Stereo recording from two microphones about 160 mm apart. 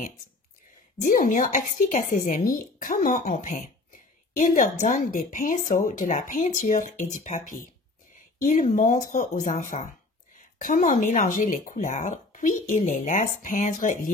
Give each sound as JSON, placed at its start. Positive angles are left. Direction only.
{"t": 1.0, "sound": "a woman's voice", "side_deg": 60}